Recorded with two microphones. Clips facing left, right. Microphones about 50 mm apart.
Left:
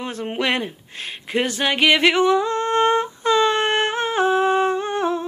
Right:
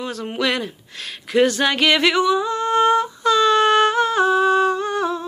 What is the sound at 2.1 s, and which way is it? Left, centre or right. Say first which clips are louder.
Yodeling: left 1 dB; left.